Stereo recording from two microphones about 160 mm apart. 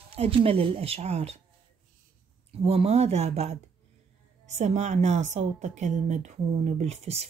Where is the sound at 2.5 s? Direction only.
40° right (ahead or behind).